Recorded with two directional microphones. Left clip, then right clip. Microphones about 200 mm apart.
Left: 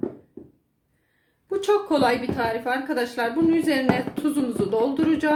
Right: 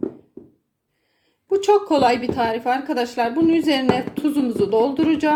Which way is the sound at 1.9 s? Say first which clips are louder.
Right 4 dB; 35° right (ahead or behind).